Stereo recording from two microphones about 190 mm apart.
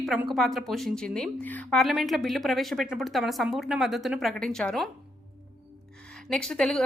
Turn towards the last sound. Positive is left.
turn(degrees=5)  # may be behind; listen again after turning